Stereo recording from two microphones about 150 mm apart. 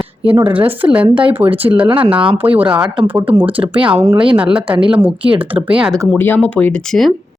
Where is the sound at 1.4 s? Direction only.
10° right (ahead or behind).